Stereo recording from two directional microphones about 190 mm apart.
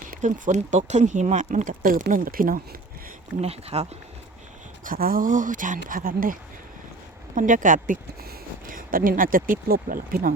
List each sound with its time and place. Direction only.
0.1 s speech: 40° right (ahead or behind)
3.4 s speech: 35° right (ahead or behind)
4.8 s speech: 50° right (ahead or behind)
7.3 s speech: 45° right (ahead or behind)